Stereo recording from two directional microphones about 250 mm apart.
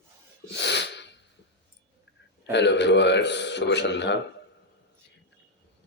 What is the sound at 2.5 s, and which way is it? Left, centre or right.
Mantra, left.